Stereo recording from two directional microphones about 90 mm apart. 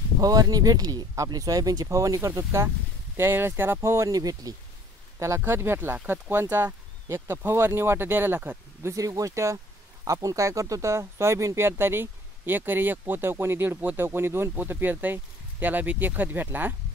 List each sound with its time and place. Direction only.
0.2 s speech: 45° right (ahead or behind)
5.2 s speech: 30° right (ahead or behind)
8.9 s speech: 40° right (ahead or behind); by 16.7 s 20° right (ahead or behind)